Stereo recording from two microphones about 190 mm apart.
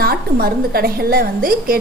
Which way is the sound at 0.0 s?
55° right (ahead or behind).